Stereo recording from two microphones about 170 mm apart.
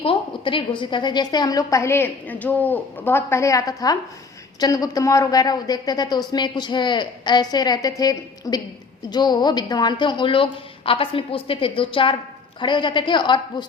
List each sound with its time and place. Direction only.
0.0 s a woman's voice: 30° left (ahead or behind)